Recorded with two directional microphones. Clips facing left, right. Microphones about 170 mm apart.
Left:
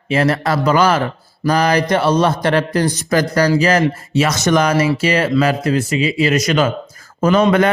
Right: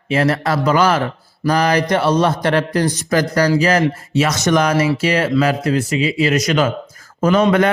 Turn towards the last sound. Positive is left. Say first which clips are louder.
# left 1 dB
turn(degrees=30)  # may be behind; listen again after turning